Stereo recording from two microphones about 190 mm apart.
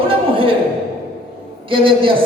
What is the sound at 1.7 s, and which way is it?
Speech, 25° right (ahead or behind).